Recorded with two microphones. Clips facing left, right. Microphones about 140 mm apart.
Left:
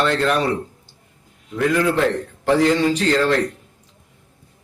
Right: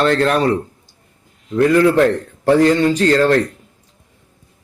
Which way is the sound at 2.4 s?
45° right (ahead or behind).